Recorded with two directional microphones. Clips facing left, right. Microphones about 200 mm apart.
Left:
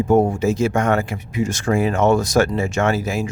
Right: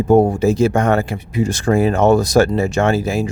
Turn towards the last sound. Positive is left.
turn(degrees=-30)  # may be behind; listen again after turning